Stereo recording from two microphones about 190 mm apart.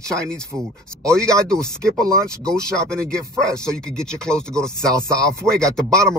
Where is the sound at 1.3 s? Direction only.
15° right (ahead or behind).